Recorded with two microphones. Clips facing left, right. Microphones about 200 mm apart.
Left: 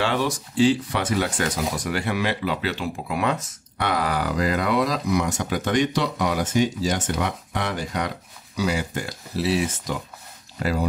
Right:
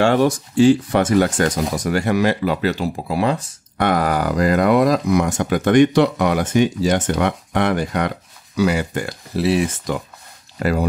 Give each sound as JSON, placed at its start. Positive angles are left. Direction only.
{"t": 0.0, "sound": "speech", "side_deg": -45}
{"t": 3.7, "sound": "speech", "side_deg": -50}